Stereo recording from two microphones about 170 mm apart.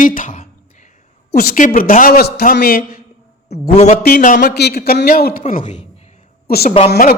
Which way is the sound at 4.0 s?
55° left (ahead or behind).